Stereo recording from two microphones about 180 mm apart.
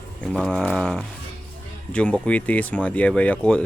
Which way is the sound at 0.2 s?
5° left (ahead or behind).